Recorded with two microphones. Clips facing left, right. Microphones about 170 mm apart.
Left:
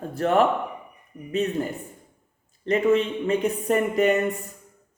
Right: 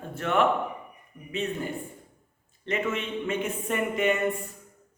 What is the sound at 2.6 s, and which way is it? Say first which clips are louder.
Speech: left 9 dB; 35° left (ahead or behind).